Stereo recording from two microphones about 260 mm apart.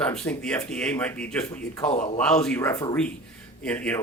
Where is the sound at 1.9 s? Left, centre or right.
Left.